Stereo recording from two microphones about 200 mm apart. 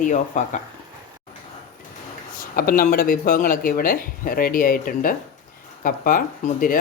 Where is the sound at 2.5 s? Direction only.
45° left (ahead or behind).